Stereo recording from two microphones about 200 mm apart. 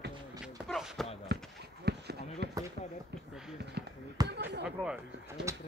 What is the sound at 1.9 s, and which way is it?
Run, 55° right (ahead or behind).